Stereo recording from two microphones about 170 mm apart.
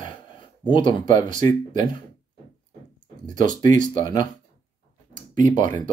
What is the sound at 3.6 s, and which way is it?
Speech, 50° right (ahead or behind).